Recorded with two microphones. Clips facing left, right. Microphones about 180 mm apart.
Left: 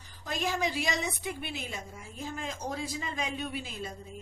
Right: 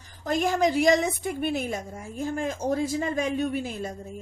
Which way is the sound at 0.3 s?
50° right (ahead or behind).